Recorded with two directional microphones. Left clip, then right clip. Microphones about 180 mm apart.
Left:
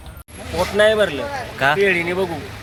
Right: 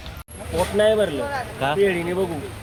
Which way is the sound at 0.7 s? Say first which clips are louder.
Left 4 dB; 15° right (ahead or behind).